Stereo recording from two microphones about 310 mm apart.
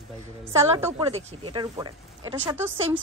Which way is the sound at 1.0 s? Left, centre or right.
Centre.